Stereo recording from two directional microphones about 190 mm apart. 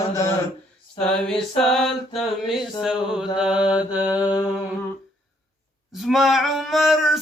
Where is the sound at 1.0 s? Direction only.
5° left (ahead or behind).